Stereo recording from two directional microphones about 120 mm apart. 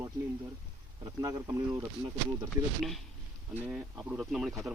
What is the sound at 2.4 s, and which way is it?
Speech, centre (ahead or behind).